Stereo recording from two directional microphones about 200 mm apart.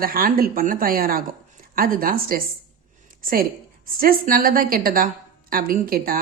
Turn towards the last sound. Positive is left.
turn(degrees=-45)  # may be behind; listen again after turning